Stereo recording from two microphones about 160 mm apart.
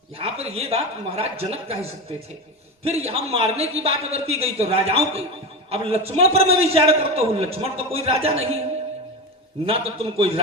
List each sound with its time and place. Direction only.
0.2 s a man's voice: 40° right (ahead or behind)
3.1 s a man's voice: 40° right (ahead or behind)
9.6 s a man's voice: 40° right (ahead or behind)